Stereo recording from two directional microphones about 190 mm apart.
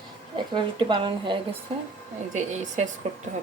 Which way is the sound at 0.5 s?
25° right (ahead or behind).